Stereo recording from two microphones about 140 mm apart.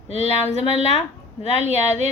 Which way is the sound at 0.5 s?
45° left (ahead or behind).